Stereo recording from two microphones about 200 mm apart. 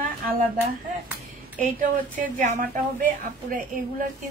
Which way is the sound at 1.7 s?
40° right (ahead or behind).